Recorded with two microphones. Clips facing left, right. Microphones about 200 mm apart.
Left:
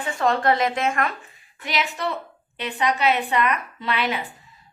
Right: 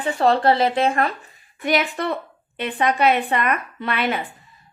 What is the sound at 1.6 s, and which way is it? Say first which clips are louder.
A woman's voice: right 5 dB; 55° right (ahead or behind).